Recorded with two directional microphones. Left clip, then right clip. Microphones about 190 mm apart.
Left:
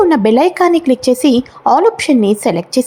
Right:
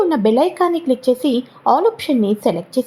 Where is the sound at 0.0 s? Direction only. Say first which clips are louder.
Left 5 dB; 20° left (ahead or behind).